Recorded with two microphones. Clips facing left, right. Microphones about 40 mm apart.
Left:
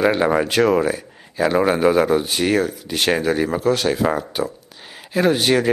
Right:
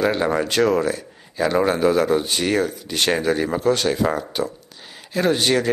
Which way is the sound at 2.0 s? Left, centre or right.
Centre.